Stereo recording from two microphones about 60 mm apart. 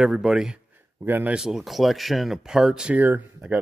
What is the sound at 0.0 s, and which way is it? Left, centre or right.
Speech, centre.